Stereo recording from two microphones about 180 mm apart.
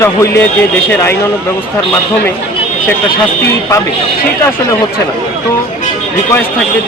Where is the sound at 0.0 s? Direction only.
15° left (ahead or behind).